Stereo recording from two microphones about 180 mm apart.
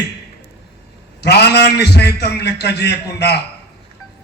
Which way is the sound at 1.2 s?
65° left (ahead or behind).